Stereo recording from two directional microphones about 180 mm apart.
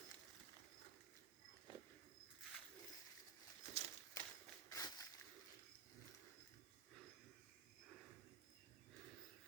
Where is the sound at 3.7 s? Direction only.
40° right (ahead or behind).